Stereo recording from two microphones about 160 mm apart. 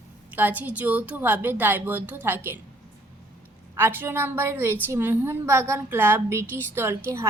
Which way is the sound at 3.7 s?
15° right (ahead or behind).